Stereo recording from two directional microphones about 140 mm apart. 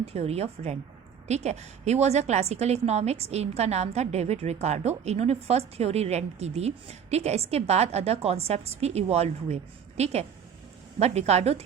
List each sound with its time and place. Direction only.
0.0 s a woman's voice: 45° right (ahead or behind)